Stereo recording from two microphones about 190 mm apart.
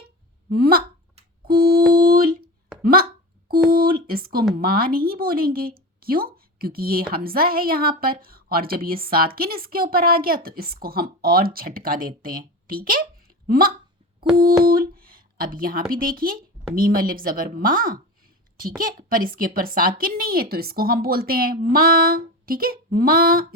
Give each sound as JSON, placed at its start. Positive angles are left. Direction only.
{"t": 0.5, "sound": "a woman's voice", "side_deg": -55}
{"t": 1.5, "sound": "music", "side_deg": -50}
{"t": 2.8, "sound": "speech", "side_deg": -50}
{"t": 3.5, "sound": "a sound", "side_deg": -50}
{"t": 4.5, "sound": "a woman's voice", "side_deg": -50}